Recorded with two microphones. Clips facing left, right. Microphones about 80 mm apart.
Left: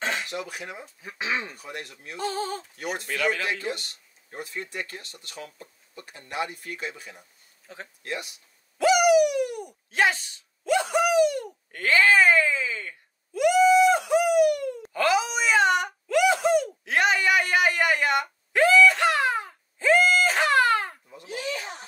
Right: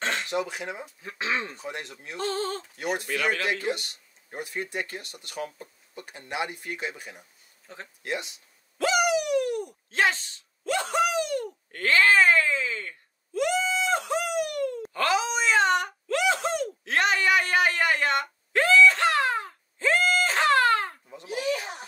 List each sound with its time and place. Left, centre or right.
0.0 s throat clearing: centre
0.3 s speech: right
1.0 s speech: centre
1.5 s speech: right
2.1 s speech: centre
2.8 s speech: centre
7.6 s speech: centre
8.0 s speech: right
8.7 s a sound: centre
14.8 s wail: centre
21.3 s a sound: centre